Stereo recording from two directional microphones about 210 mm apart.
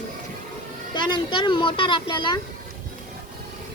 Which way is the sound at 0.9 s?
20° left (ahead or behind).